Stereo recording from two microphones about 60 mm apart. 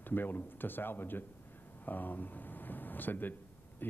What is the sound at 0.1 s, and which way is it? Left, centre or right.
A man's voice, left.